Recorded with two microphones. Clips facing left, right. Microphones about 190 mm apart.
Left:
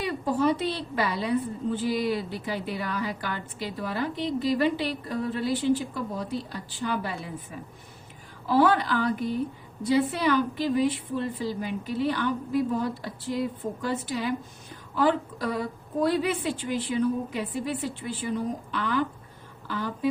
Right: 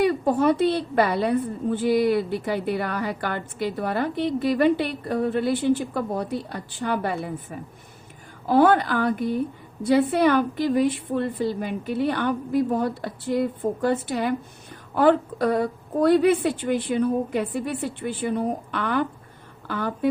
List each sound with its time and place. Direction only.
0.0 s a woman's voice: 55° right (ahead or behind)